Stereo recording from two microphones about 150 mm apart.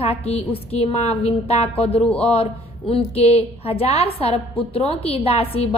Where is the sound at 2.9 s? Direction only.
40° left (ahead or behind).